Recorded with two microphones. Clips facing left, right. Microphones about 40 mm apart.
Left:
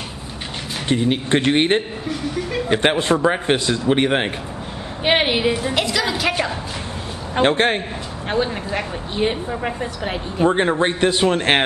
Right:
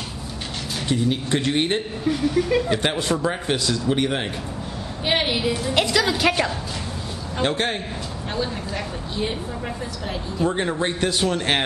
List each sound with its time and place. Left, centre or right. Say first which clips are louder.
0.8 s speech: left 4 dB; left
2.0 s a woman's voice: right 4 dB; centre
2.7 s a woman's voice: left 5 dB; left
5.8 s a woman's voice: right 1 dB; centre
7.3 s speech: left 7 dB; left